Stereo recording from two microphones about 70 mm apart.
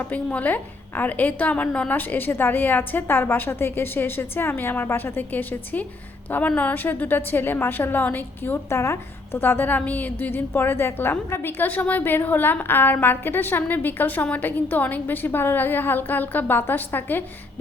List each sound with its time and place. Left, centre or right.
0.0 s a woman's voice: left
8.7 s a woman's voice: left
9.4 s a woman's voice: left